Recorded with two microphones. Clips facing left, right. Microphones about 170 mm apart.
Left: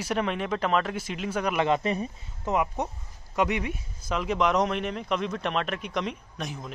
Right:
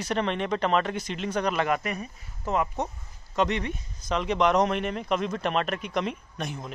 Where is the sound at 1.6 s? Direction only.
25° left (ahead or behind).